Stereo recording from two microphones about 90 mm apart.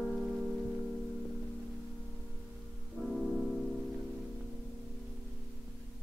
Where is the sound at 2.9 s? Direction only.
5° right (ahead or behind).